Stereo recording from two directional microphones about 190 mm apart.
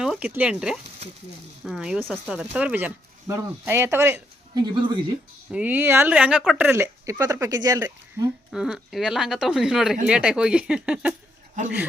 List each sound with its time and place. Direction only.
0.0 s speech: 5° right (ahead or behind)
4.6 s speech: 25° right (ahead or behind)
5.5 s speech: 5° right (ahead or behind)
8.5 s speech: 5° right (ahead or behind)